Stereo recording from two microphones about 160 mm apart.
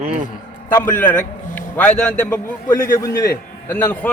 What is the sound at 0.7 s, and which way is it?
A man's voice, 15° left (ahead or behind).